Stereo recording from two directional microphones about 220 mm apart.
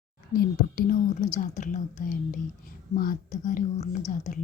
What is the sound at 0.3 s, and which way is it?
Speech, 40° left (ahead or behind).